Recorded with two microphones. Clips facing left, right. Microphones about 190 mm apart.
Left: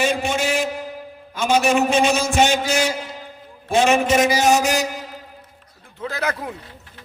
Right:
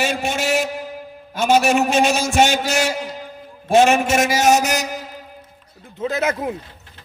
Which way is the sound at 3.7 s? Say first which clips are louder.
Right 2 dB; 45° right (ahead or behind).